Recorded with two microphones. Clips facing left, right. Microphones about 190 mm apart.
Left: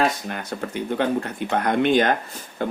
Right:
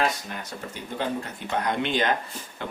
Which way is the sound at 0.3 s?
60° left (ahead or behind).